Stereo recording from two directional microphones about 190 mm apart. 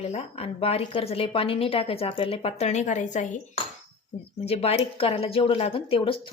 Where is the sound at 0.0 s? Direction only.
35° left (ahead or behind).